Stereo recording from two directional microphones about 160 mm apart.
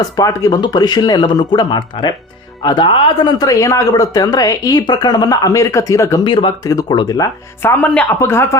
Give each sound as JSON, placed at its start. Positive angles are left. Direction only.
{"t": 0.0, "sound": "speech", "side_deg": 20}